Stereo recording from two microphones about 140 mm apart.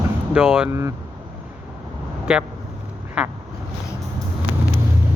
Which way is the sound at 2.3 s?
5° right (ahead or behind).